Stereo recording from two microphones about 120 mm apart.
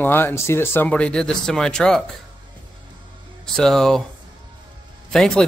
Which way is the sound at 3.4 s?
5° left (ahead or behind).